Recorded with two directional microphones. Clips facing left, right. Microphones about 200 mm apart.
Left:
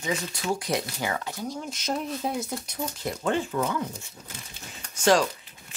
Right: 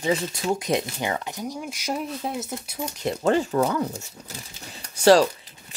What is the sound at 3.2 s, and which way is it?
Speech, 40° right (ahead or behind).